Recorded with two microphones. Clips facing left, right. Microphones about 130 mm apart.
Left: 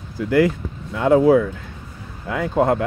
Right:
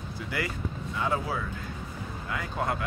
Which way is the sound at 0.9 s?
90° left.